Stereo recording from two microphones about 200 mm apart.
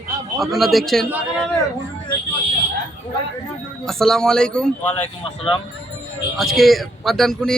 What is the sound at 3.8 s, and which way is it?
Speech, centre (ahead or behind).